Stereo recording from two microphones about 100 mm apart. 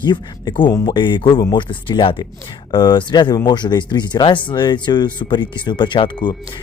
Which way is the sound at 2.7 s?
45° left (ahead or behind).